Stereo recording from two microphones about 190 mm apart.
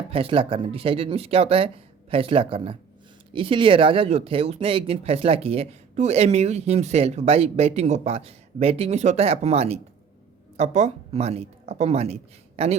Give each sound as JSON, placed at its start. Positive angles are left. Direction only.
{"t": 0.1, "sound": "speech", "side_deg": -30}